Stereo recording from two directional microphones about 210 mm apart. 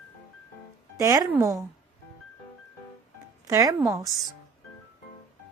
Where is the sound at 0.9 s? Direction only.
15° right (ahead or behind).